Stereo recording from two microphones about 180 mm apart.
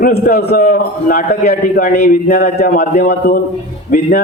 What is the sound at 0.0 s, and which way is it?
A man's voice, 60° left (ahead or behind).